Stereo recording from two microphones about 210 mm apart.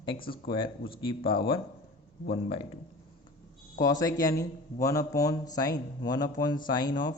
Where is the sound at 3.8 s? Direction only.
15° left (ahead or behind).